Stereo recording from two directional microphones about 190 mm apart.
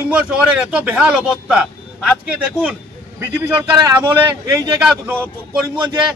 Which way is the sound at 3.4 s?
15° right (ahead or behind).